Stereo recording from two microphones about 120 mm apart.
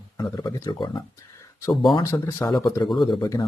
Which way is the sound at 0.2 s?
30° left (ahead or behind).